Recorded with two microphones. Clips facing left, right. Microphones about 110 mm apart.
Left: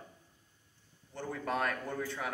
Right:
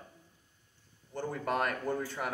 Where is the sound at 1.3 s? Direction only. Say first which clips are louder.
Right 1 dB; 5° right (ahead or behind).